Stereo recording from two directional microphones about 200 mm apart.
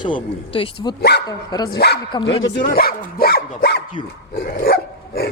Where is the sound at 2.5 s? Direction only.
55° left (ahead or behind).